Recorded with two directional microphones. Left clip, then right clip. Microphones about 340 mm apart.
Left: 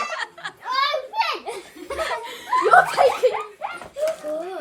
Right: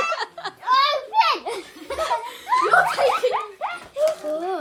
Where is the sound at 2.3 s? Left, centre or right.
Centre.